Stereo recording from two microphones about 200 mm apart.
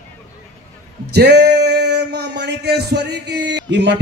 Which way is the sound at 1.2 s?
55° right (ahead or behind).